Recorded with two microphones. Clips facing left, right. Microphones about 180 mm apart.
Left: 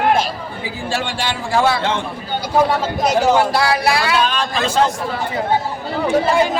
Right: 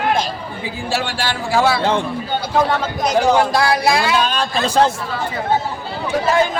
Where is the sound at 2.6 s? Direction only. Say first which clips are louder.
Left 2 dB; 10° left (ahead or behind).